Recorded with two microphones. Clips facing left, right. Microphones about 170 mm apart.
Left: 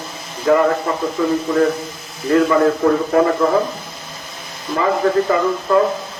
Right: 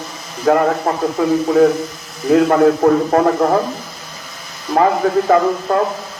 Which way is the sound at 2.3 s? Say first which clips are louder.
Right 3 dB; 65° right (ahead or behind).